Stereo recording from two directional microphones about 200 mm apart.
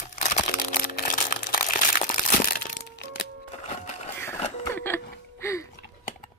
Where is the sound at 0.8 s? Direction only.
45° left (ahead or behind).